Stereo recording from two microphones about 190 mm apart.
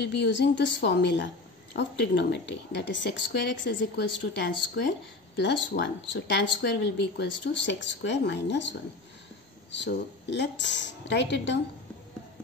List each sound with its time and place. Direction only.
0.1 s a woman's voice: 65° left (ahead or behind)